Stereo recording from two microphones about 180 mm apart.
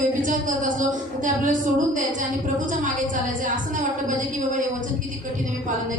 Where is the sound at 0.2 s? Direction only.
45° right (ahead or behind).